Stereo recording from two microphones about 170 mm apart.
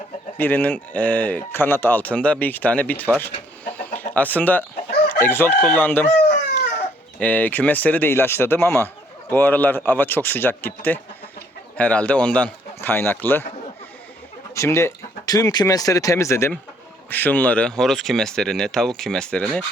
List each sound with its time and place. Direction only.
0.3 s speech: 10° left (ahead or behind)
3.2 s chicken: 10° left (ahead or behind)
5.2 s speech: 15° left (ahead or behind)
7.2 s speech: 10° left (ahead or behind)
14.5 s speech: 15° left (ahead or behind)